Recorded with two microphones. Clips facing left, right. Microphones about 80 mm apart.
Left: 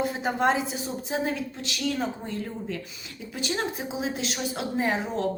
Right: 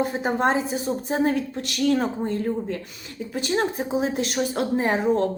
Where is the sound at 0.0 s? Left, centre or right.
Right.